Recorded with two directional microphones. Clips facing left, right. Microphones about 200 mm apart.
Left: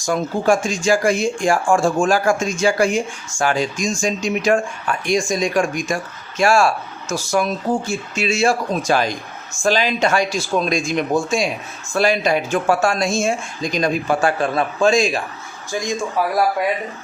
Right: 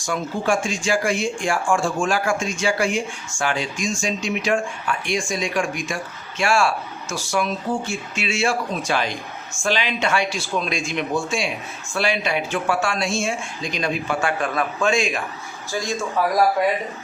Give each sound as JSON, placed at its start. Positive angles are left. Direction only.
{"t": 0.0, "sound": "speech", "side_deg": 40}
{"t": 15.7, "sound": "a man's voice", "side_deg": 15}